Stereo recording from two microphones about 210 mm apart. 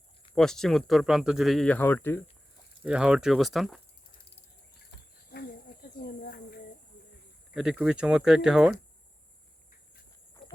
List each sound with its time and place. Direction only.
0.3 s speech: centre (ahead or behind)
2.8 s speech: 5° right (ahead or behind)
5.3 s snake: 50° left (ahead or behind)
7.5 s speech: 5° right (ahead or behind)